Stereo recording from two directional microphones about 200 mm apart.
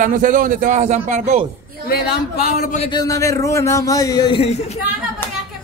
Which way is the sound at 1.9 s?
50° left (ahead or behind).